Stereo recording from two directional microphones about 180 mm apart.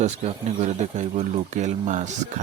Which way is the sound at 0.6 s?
40° right (ahead or behind).